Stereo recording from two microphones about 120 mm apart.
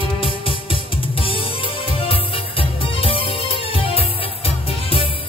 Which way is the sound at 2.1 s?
50° left (ahead or behind).